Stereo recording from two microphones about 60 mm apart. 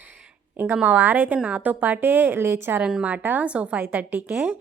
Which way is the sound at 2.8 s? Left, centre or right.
Centre.